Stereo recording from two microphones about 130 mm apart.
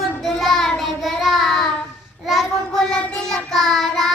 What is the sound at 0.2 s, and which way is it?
Child singing, centre (ahead or behind).